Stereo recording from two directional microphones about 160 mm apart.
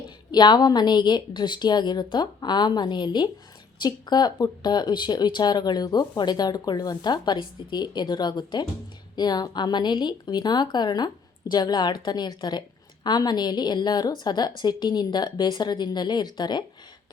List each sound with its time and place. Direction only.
0.3 s speech: 25° left (ahead or behind)